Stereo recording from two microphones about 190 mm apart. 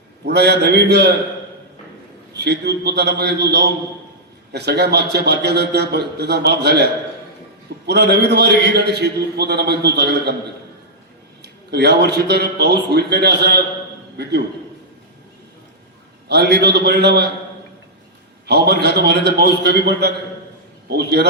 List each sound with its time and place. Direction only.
0.3 s a man's voice: 60° right (ahead or behind)
2.3 s a man's voice: 60° right (ahead or behind)
7.9 s a man's voice: 60° right (ahead or behind)
11.4 s a man's voice: 60° right (ahead or behind)
16.3 s a man's voice: 60° right (ahead or behind)
18.4 s a man's voice: 60° right (ahead or behind)